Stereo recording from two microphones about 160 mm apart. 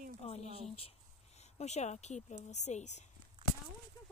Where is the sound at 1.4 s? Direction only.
45° left (ahead or behind).